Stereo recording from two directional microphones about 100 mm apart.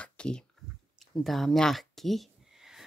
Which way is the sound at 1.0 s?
Centre (ahead or behind).